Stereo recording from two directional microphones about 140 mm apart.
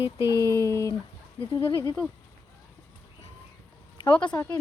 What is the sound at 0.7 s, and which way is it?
Speech, 20° left (ahead or behind).